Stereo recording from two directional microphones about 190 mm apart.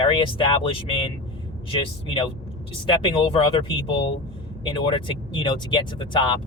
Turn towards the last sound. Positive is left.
turn(degrees=25)  # may be behind; listen again after turning